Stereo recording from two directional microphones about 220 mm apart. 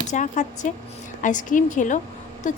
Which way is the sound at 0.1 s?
35° left (ahead or behind).